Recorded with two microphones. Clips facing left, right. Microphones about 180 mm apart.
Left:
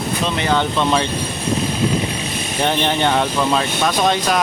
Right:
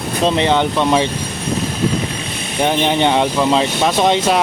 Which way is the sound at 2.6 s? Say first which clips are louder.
Right 3 dB; 15° right (ahead or behind).